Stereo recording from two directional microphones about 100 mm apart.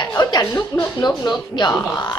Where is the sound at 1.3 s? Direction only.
50° left (ahead or behind).